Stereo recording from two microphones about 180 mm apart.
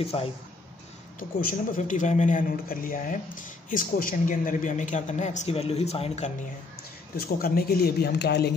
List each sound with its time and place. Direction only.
0.0 s speech: 30° left (ahead or behind)
1.4 s a man's voice: 45° left (ahead or behind)
7.2 s speech: 55° left (ahead or behind)